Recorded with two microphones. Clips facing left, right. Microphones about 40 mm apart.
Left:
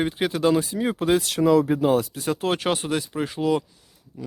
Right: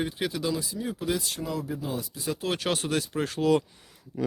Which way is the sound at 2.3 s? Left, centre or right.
Left.